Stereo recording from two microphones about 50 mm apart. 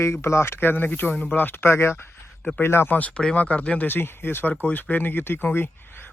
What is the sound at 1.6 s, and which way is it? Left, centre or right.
Speech, left.